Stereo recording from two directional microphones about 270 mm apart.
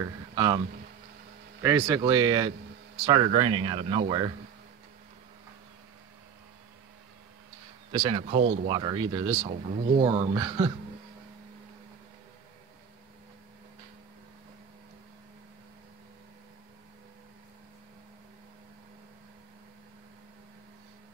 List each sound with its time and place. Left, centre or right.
0.0 s a man's voice: centre
1.6 s speech: centre
7.9 s speech: centre